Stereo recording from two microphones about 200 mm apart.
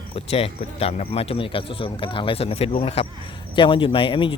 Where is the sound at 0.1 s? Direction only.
30° left (ahead or behind).